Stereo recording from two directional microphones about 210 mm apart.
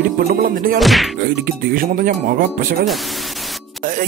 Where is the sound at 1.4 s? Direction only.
40° right (ahead or behind).